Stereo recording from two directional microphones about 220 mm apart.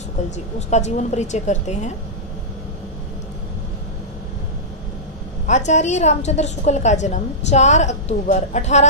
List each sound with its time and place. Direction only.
0.6 s a woman's voice: 30° left (ahead or behind)
5.5 s a woman's voice: 30° left (ahead or behind)